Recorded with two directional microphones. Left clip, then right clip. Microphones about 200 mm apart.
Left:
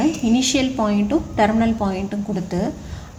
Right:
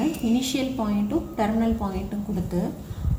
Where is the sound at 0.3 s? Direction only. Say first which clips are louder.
Left 7 dB; 55° left (ahead or behind).